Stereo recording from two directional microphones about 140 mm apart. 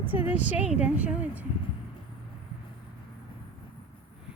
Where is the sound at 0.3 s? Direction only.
10° right (ahead or behind).